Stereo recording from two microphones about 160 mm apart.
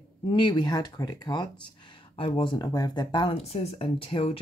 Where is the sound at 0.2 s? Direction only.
30° left (ahead or behind).